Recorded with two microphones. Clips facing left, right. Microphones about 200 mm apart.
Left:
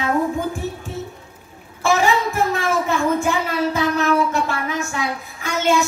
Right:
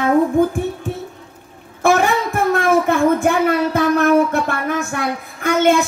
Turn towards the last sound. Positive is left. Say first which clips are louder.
# right 5 dB
turn(degrees=-55)  # may be behind; listen again after turning